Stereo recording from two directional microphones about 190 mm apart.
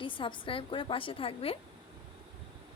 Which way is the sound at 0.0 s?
25° left (ahead or behind).